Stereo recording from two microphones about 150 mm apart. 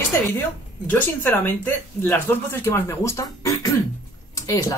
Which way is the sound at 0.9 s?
10° left (ahead or behind).